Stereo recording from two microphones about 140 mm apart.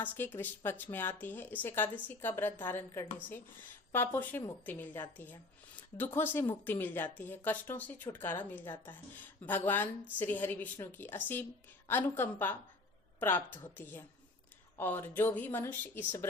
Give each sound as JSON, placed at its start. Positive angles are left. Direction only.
{"t": 0.0, "sound": "a woman's voice", "side_deg": 15}